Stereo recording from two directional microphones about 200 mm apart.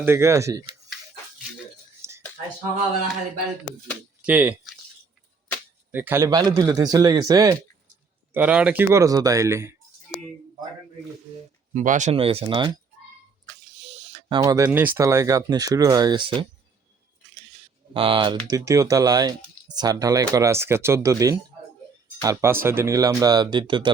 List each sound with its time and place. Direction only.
0.0 s speech: 15° right (ahead or behind)
2.0 s a sound: 15° right (ahead or behind)
4.2 s speech: 5° right (ahead or behind)
5.9 s speech: 10° right (ahead or behind)
8.3 s speech: 5° right (ahead or behind)
11.7 s speech: 40° right (ahead or behind); by 12.8 s 25° right (ahead or behind)
13.9 s speech: 30° right (ahead or behind)
17.9 s speech: 25° right (ahead or behind)